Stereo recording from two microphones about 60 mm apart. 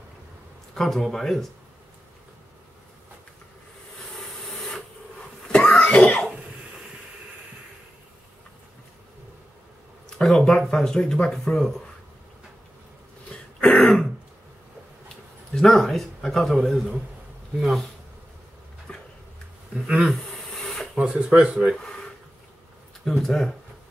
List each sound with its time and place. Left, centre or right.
0.7 s a man's voice: centre
4.6 s wood: centre
5.5 s a sound: centre
10.2 s speech: centre
13.3 s throat clearing: centre
13.7 s throat clearing: centre
15.5 s a man's voice: centre
18.9 s a sound: centre
19.7 s a sound: centre
20.1 s a sound: centre
20.9 s speech: centre
23.0 s a man's voice: centre